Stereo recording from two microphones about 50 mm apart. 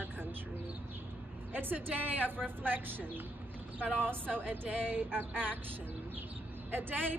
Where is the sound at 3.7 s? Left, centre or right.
Right.